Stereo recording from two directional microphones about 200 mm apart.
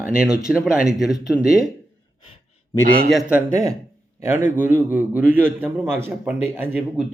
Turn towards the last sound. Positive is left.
turn(degrees=-10)  # may be behind; listen again after turning